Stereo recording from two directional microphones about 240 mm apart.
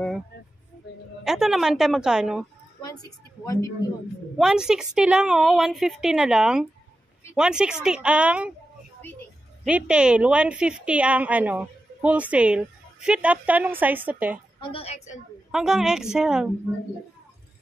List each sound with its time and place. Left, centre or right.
1.2 s a woman's voice: centre
2.8 s a sound: centre
4.4 s a woman's voice: centre
9.7 s a woman's voice: centre
14.6 s a woman's voice: left
15.5 s a woman's voice: centre